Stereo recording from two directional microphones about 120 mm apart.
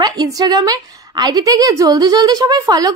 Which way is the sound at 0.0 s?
35° right (ahead or behind).